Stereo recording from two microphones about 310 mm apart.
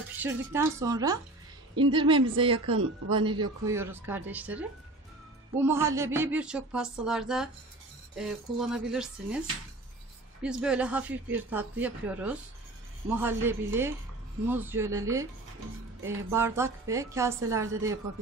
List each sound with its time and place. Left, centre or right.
0.2 s a woman's voice: centre
10.4 s a woman's voice: centre
16.3 s a woman's voice: centre